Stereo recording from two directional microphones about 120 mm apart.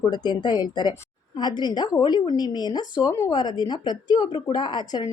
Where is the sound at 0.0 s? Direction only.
35° left (ahead or behind).